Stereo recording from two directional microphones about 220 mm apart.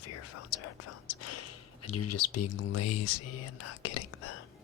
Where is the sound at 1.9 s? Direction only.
90° left.